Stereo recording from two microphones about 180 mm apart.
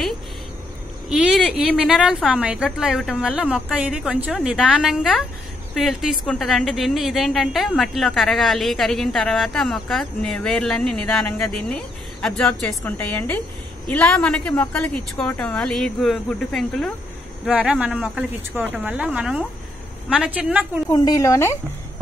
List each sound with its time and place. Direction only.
1.0 s a woman's voice: 5° right (ahead or behind)
20.9 s speech: 20° left (ahead or behind)